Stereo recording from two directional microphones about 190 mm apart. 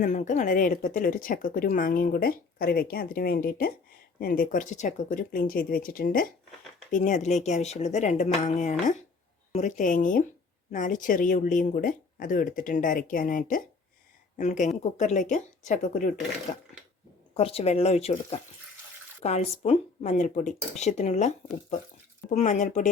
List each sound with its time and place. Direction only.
0.0 s speech: 40° left (ahead or behind)
17.3 s speech: 30° left (ahead or behind)